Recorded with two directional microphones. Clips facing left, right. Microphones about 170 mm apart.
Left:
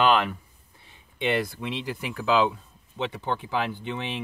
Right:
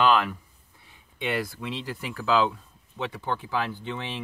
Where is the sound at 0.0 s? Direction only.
20° left (ahead or behind).